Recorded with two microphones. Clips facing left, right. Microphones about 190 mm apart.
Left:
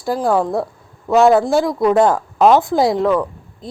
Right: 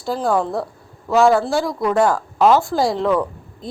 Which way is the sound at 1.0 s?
20° left (ahead or behind).